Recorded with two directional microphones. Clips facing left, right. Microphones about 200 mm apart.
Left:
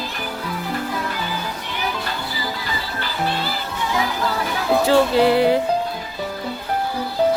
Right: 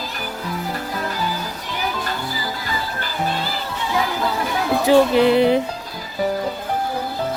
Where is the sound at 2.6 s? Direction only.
45° right (ahead or behind).